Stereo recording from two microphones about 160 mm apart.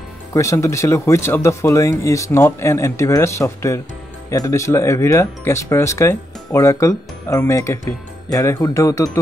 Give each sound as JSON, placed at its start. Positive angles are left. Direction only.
{"t": 0.3, "sound": "speech", "side_deg": 20}